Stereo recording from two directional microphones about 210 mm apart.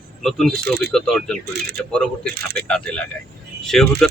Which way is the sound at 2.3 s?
50° right (ahead or behind).